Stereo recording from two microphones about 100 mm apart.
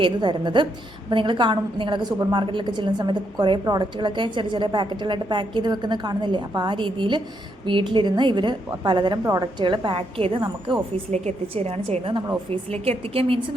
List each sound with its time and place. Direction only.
0.0 s a woman's voice: 50° right (ahead or behind); by 10.3 s 65° right (ahead or behind)
11.3 s a woman's voice: 85° right; by 12.2 s 65° right (ahead or behind)
12.5 s a woman's voice: 90° right; by 13.6 s 70° right (ahead or behind)